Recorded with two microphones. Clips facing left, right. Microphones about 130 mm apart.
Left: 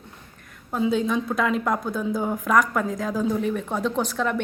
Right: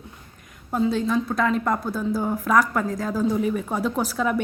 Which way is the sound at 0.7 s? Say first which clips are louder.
Right 1 dB; centre (ahead or behind).